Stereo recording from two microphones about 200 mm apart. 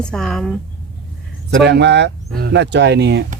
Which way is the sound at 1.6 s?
60° right (ahead or behind).